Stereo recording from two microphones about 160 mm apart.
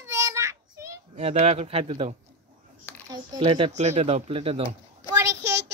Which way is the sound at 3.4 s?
35° right (ahead or behind).